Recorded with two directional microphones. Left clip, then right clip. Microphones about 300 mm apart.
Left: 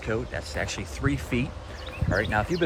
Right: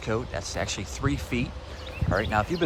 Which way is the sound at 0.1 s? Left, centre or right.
Centre.